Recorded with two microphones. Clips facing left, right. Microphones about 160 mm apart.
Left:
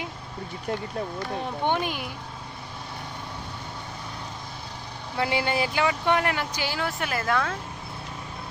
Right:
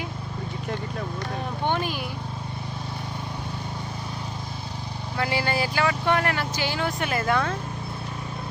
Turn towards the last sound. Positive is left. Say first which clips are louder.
# right 2 dB
turn(degrees=0)  # may be behind; listen again after turning